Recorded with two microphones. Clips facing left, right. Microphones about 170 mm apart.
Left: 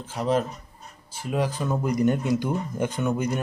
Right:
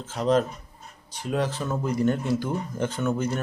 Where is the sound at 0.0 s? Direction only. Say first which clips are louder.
Right 2 dB; 10° left (ahead or behind).